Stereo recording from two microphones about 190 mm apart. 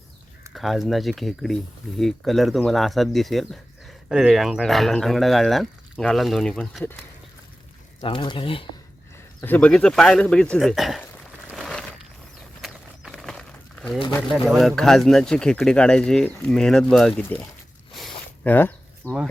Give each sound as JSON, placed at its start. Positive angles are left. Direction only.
{"t": 0.5, "sound": "speech", "side_deg": 0}
{"t": 8.0, "sound": "speech", "side_deg": 25}
{"t": 9.4, "sound": "speech", "side_deg": 10}
{"t": 12.6, "sound": "a sound", "side_deg": 0}
{"t": 14.4, "sound": "speech", "side_deg": 0}
{"t": 17.9, "sound": "a sound", "side_deg": 5}
{"t": 19.0, "sound": "speech", "side_deg": -5}